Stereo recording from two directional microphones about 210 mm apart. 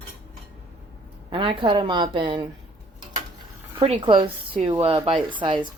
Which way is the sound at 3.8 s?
25° right (ahead or behind).